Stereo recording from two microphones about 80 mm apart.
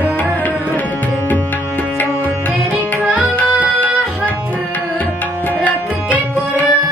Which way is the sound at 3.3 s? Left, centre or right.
Centre.